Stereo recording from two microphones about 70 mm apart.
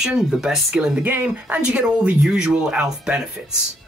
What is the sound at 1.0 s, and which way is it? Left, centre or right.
Speech, right.